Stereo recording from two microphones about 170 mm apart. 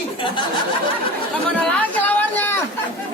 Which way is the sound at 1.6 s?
5° left (ahead or behind).